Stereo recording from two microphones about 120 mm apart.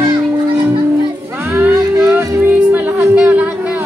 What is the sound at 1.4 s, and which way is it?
Music, 20° right (ahead or behind).